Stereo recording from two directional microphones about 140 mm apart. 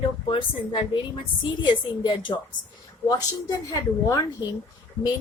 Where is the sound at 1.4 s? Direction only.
35° left (ahead or behind).